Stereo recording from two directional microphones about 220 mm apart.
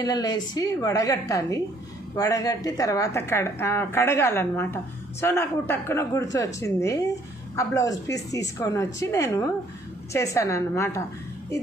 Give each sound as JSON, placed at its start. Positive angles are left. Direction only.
{"t": 0.0, "sound": "a woman's voice", "side_deg": 15}